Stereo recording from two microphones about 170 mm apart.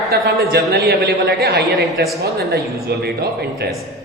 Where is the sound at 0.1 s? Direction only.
65° right (ahead or behind).